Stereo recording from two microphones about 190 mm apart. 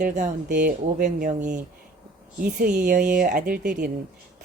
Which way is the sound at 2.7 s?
40° right (ahead or behind).